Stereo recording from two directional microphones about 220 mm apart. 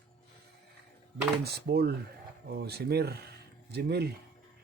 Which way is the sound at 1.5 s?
45° right (ahead or behind).